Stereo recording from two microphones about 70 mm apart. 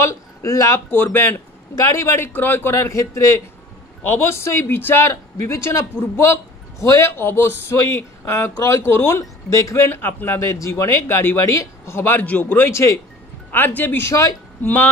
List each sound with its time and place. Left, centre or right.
0.0 s speech: left
0.8 s speech: left
1.8 s speech: left
2.7 s speech: left
4.0 s a man's voice: left
12.2 s speech: left
12.5 s speech: left
13.5 s speech: left
14.0 s speech: left
14.6 s speech: left